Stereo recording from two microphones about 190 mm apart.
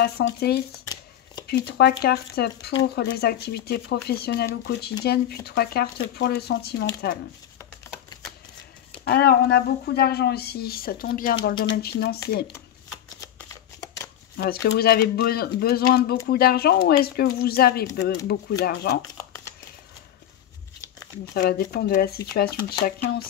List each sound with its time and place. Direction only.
0.0 s speech: 60° left (ahead or behind)
1.7 s speech: 55° left (ahead or behind)
9.0 s speech: 55° left (ahead or behind)
14.3 s speech: 60° left (ahead or behind)
21.3 s speech: 55° left (ahead or behind)